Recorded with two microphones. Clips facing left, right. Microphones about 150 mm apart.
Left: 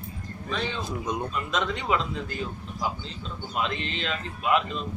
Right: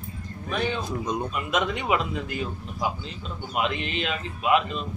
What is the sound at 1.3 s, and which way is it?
A man's voice, 10° right (ahead or behind).